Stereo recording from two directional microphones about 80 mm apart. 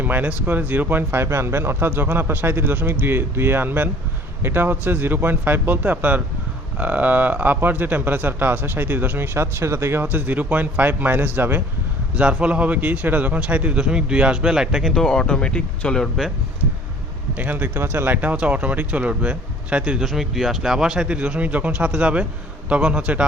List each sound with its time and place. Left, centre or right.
0.0 s speech: right
12.1 s a man's voice: centre
14.9 s speech: centre
17.3 s speech: right
20.1 s a man's voice: centre